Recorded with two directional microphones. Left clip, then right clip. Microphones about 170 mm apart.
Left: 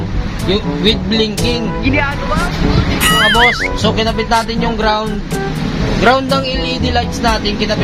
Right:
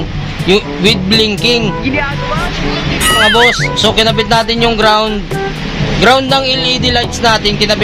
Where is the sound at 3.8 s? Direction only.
45° right (ahead or behind).